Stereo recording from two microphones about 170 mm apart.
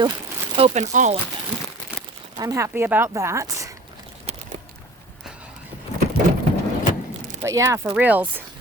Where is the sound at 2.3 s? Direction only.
20° right (ahead or behind).